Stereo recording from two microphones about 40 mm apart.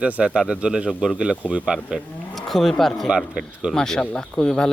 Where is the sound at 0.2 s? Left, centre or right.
Right.